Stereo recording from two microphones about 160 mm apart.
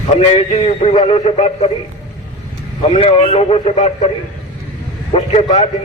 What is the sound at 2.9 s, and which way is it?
A man's voice, 35° left (ahead or behind).